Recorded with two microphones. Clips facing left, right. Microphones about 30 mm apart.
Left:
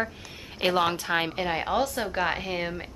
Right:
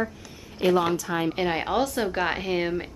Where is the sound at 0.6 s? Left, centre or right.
Left.